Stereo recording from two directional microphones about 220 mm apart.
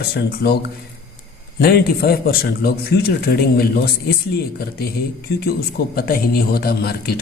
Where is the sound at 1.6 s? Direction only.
45° left (ahead or behind).